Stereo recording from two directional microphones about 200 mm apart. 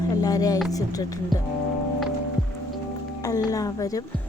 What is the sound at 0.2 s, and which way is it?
Speech, 20° left (ahead or behind).